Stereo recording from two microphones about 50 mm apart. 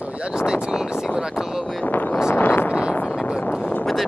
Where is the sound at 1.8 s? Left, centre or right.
Left.